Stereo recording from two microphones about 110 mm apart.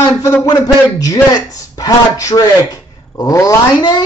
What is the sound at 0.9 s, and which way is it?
A man's voice, 35° left (ahead or behind).